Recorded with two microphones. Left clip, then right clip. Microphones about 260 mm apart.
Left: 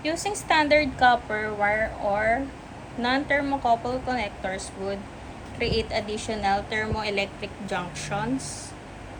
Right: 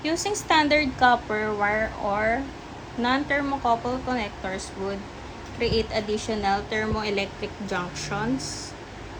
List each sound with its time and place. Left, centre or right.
0.0 s a woman's voice: right